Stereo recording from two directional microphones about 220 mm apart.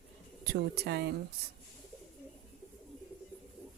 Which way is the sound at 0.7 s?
45° right (ahead or behind).